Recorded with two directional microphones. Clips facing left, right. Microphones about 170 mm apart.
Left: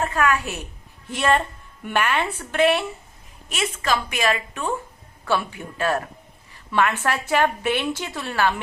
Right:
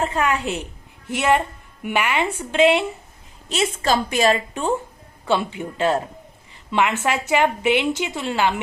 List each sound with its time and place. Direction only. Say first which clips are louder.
0.0 s a woman's voice: right 1 dB; 25° right (ahead or behind)
3.5 s a woman's voice: right 4 dB; 30° right (ahead or behind)